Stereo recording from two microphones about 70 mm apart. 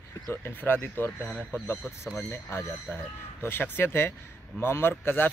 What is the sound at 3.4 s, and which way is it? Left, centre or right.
Speech, left.